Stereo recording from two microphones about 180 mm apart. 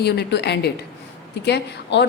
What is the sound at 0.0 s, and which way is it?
A woman's voice, 70° left (ahead or behind).